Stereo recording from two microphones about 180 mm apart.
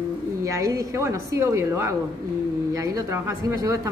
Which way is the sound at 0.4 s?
15° right (ahead or behind).